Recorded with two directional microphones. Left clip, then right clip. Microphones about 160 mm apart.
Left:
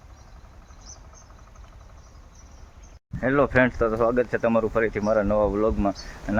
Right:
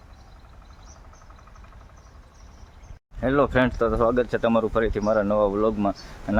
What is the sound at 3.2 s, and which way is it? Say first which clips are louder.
Speech: left 1 dB; 20° right (ahead or behind).